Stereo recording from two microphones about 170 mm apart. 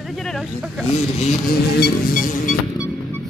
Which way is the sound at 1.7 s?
60° left (ahead or behind).